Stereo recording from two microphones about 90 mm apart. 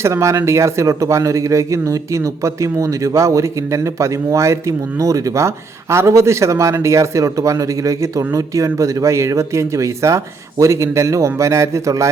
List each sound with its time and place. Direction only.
0.0 s speech: 35° right (ahead or behind)